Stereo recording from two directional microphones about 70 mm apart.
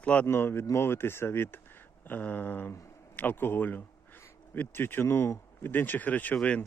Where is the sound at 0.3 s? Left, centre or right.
Left.